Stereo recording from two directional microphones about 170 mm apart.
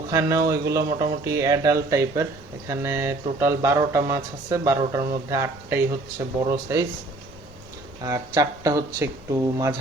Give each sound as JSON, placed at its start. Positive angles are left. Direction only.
{"t": 0.1, "sound": "speech", "side_deg": -15}
{"t": 8.0, "sound": "speech", "side_deg": -20}